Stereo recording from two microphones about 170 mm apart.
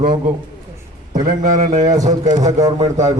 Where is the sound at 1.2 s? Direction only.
45° right (ahead or behind).